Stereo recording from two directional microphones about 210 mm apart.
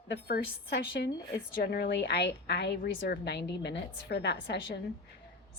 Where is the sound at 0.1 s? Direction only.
45° left (ahead or behind).